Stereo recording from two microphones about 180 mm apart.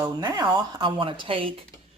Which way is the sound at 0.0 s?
15° right (ahead or behind).